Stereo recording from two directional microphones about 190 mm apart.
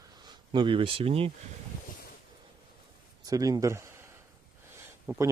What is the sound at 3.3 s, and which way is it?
A man's voice, 20° right (ahead or behind).